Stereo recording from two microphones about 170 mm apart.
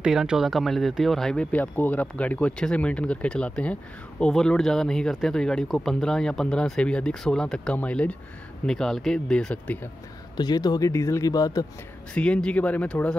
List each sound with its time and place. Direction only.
0.0 s speech: 5° right (ahead or behind)
10.3 s speech: 25° left (ahead or behind)
12.1 s speech: 5° left (ahead or behind)